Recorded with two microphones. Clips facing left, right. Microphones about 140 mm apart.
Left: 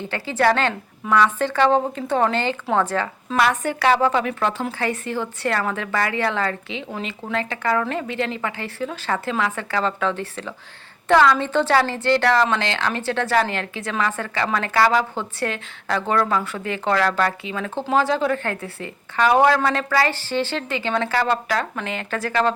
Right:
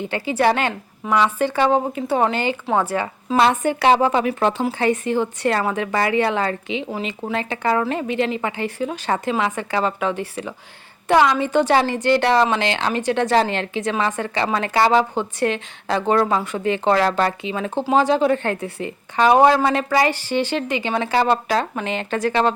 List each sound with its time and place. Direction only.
0.1 s a woman's voice: 15° right (ahead or behind)
3.3 s a woman's voice: 25° right (ahead or behind)